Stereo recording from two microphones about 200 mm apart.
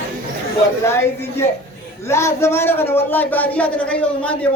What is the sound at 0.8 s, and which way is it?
Speech, 10° left (ahead or behind).